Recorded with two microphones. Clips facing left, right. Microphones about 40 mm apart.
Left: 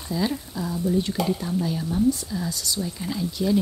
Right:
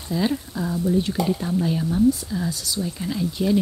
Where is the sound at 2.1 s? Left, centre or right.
Centre.